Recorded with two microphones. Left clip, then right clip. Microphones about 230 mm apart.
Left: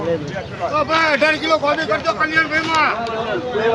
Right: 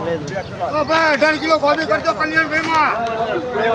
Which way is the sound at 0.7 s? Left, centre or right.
Left.